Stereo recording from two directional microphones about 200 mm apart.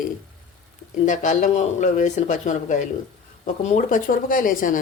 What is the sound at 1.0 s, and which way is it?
A woman's voice, 40° left (ahead or behind).